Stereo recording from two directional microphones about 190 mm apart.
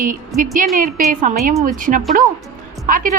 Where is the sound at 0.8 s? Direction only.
45° right (ahead or behind).